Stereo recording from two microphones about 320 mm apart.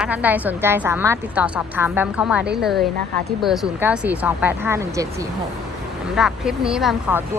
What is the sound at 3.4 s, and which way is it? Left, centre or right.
A woman's voice, centre.